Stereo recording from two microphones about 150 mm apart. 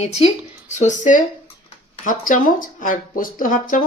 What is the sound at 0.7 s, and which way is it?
Speech, 55° left (ahead or behind).